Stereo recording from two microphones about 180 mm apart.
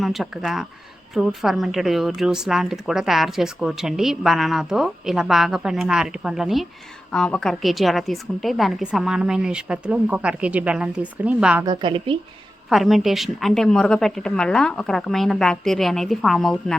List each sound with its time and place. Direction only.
0.0 s a woman's voice: centre (ahead or behind)
11.6 s a woman's voice: 25° right (ahead or behind)
12.7 s a woman's voice: centre (ahead or behind)